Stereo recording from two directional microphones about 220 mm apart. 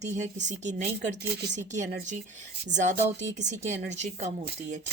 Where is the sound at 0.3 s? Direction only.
35° right (ahead or behind).